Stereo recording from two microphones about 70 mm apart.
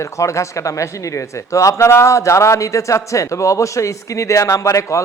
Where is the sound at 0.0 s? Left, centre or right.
Left.